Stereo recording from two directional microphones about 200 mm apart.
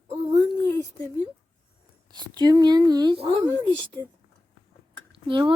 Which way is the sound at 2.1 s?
20° right (ahead or behind).